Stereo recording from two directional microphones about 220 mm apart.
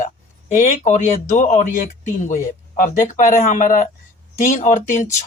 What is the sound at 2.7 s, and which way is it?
Speech, 35° left (ahead or behind).